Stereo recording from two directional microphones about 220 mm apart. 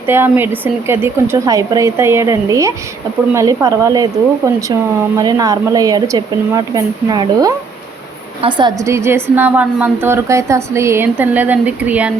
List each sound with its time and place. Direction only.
0.1 s speech: 10° right (ahead or behind)
5.1 s speech: 15° right (ahead or behind)